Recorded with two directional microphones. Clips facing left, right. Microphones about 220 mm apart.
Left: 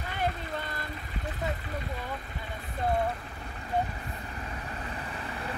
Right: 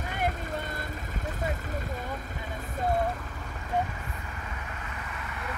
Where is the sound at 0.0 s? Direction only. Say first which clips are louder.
Right 1 dB; 45° right (ahead or behind).